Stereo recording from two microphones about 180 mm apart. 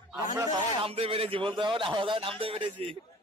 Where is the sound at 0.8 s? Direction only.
30° right (ahead or behind).